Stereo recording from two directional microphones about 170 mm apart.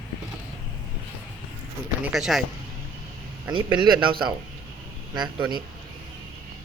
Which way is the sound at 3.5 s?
25° right (ahead or behind).